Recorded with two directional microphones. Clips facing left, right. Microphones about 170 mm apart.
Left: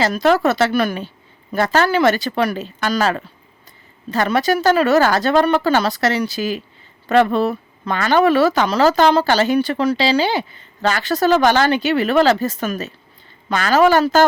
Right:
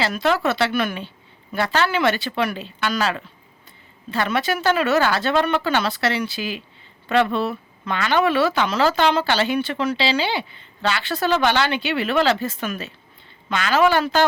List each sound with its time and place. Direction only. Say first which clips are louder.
0.0 s speech: left 5 dB; 40° left (ahead or behind)